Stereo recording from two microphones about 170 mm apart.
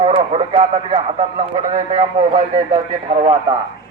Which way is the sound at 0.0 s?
30° right (ahead or behind).